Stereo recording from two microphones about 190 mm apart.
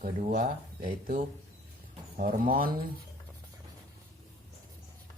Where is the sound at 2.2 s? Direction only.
50° right (ahead or behind).